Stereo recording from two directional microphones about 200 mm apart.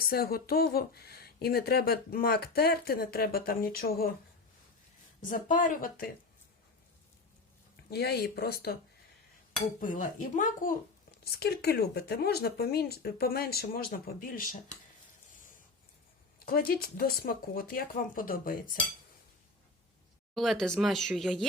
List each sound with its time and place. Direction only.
0.0 s speech: 50° left (ahead or behind)
5.2 s speech: 40° left (ahead or behind)
7.9 s speech: 55° left (ahead or behind)
9.8 s speech: 40° left (ahead or behind)
16.5 s speech: 50° left (ahead or behind)
20.3 s speech: centre (ahead or behind)